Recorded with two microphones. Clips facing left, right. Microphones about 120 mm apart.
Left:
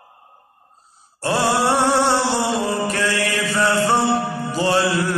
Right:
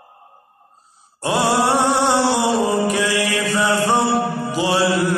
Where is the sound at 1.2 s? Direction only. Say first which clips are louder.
Right 1 dB; 15° right (ahead or behind).